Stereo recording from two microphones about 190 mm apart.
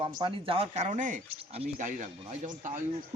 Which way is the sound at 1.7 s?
45° right (ahead or behind).